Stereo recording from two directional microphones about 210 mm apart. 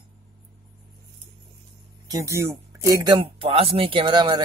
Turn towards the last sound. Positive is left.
turn(degrees=-20)  # may be behind; listen again after turning